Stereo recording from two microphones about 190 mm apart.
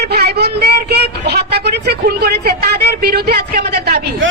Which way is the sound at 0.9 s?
60° right (ahead or behind).